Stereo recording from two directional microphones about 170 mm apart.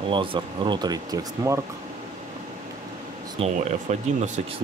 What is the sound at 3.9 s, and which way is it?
Speech, 45° right (ahead or behind).